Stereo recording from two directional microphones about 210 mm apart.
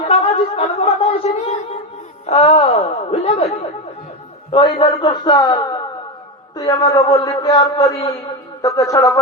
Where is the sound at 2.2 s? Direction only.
30° left (ahead or behind).